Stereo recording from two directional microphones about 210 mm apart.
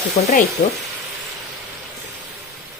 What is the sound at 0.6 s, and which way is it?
Speech, 40° left (ahead or behind).